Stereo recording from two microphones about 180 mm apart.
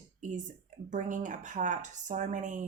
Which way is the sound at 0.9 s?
45° right (ahead or behind).